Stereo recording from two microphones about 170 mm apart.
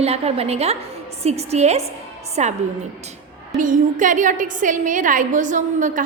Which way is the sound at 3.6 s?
50° right (ahead or behind).